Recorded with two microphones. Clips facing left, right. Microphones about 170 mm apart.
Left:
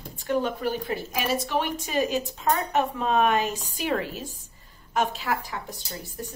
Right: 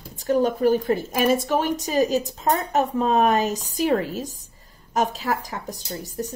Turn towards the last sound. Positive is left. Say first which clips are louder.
# right 6 dB
turn(degrees=-40)  # may be behind; listen again after turning